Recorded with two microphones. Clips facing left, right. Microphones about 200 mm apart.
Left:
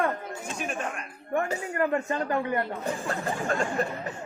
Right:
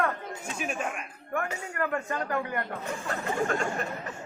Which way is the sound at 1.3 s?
30° left (ahead or behind).